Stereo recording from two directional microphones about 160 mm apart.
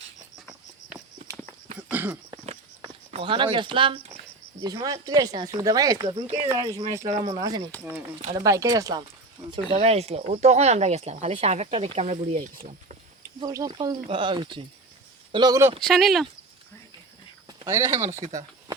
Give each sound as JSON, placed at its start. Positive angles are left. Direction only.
{"t": 0.3, "sound": "cricket", "side_deg": 0}
{"t": 1.9, "sound": "a sound", "side_deg": -10}
{"t": 3.1, "sound": "speech", "side_deg": -35}
{"t": 9.5, "sound": "speech", "side_deg": -40}
{"t": 13.4, "sound": "speech", "side_deg": -25}
{"t": 15.8, "sound": "speech", "side_deg": 0}
{"t": 17.7, "sound": "speech", "side_deg": -15}